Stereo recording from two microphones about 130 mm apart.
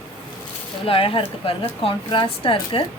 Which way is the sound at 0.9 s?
45° left (ahead or behind).